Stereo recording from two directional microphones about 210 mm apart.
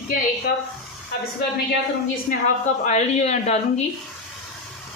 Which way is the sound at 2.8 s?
30° left (ahead or behind).